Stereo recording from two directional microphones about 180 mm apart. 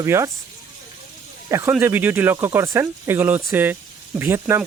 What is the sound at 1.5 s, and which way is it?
Speech, 15° right (ahead or behind).